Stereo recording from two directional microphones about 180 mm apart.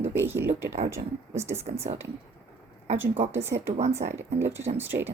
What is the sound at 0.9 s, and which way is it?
Speech, 15° right (ahead or behind).